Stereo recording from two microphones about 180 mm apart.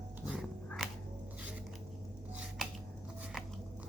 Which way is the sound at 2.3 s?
5° right (ahead or behind).